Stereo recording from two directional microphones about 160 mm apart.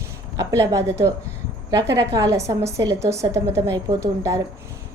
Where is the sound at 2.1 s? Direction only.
20° right (ahead or behind).